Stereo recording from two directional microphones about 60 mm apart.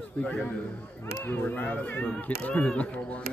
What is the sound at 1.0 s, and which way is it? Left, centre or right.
Speech, left.